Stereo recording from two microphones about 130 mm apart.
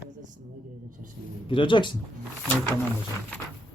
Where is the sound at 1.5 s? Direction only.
40° left (ahead or behind).